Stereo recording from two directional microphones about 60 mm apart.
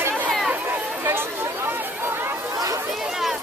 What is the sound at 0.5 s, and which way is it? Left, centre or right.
Chatter, right.